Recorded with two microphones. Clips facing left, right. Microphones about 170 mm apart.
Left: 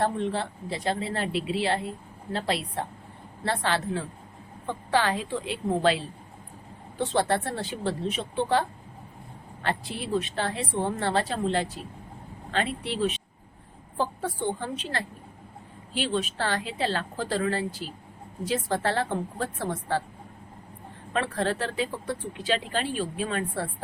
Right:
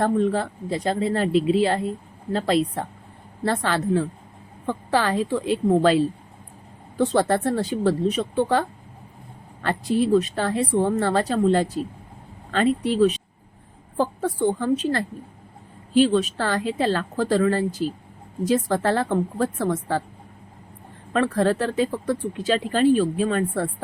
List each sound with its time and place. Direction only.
0.0 s speech: 45° right (ahead or behind)
7.0 s speech: 45° right (ahead or behind)
9.6 s speech: 45° right (ahead or behind)
21.1 s speech: 45° right (ahead or behind)